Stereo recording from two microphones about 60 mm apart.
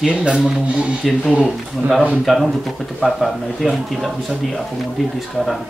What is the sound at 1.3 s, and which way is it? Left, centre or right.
Speech, centre.